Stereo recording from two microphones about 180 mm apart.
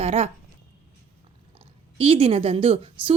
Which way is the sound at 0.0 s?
35° right (ahead or behind).